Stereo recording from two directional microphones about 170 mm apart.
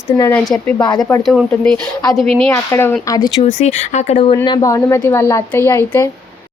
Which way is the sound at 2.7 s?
15° left (ahead or behind).